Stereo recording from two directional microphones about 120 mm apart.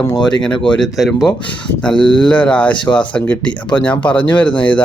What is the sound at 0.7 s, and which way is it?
Speech, centre (ahead or behind).